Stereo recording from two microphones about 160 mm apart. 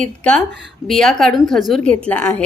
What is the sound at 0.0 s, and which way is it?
A woman's voice, 5° left (ahead or behind).